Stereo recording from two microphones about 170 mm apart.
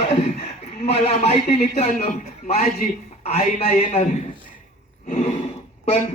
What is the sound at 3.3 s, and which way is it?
Speech, 35° left (ahead or behind).